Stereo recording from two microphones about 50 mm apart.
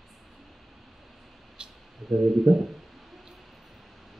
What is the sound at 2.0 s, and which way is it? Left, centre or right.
Speech, centre.